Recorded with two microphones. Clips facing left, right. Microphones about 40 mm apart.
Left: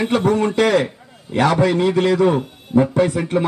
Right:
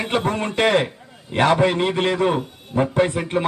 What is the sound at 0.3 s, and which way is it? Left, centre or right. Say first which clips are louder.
A man's voice: left 4 dB; right.